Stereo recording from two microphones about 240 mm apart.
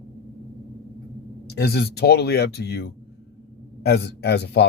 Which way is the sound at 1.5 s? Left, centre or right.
Left.